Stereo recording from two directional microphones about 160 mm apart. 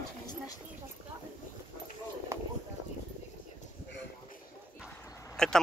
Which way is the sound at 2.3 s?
15° right (ahead or behind).